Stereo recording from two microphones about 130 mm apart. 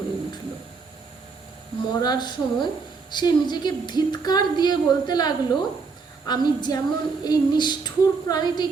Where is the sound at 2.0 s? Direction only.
30° left (ahead or behind).